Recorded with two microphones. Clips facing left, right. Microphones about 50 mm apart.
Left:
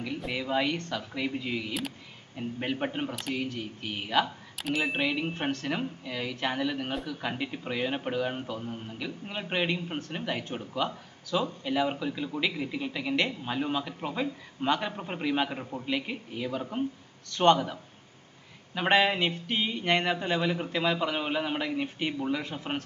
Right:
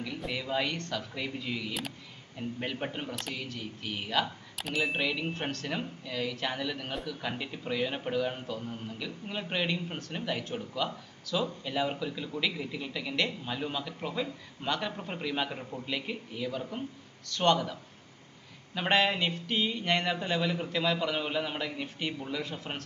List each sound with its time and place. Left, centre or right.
0.3 s a man's voice: centre
4.5 s a man's voice: centre